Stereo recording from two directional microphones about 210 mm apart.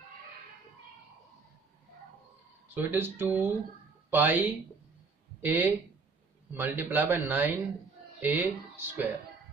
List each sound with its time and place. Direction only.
2.7 s a man's voice: 10° right (ahead or behind)